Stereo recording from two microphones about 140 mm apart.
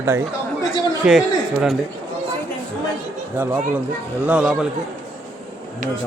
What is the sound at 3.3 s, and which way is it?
Speech, 15° right (ahead or behind).